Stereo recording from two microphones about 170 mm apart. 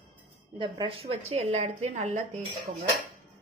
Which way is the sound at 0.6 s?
30° right (ahead or behind).